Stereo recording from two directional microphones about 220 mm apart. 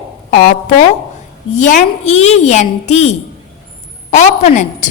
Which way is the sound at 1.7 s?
30° left (ahead or behind).